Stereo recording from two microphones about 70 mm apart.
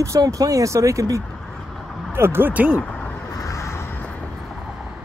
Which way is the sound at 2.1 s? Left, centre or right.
Right.